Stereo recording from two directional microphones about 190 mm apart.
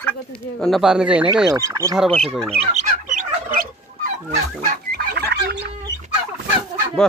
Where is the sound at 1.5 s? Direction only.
15° right (ahead or behind).